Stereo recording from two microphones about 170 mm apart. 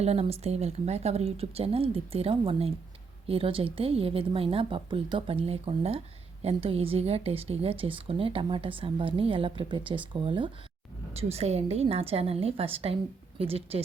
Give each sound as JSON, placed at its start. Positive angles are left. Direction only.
{"t": 0.0, "sound": "speech", "side_deg": -35}